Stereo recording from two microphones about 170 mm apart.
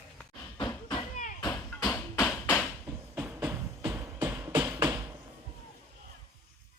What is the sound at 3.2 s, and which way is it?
Music, 10° right (ahead or behind).